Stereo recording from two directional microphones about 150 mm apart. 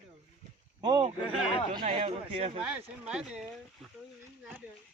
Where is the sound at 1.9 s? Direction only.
40° right (ahead or behind).